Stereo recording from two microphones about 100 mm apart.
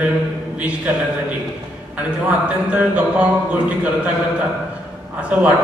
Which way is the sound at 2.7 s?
15° right (ahead or behind).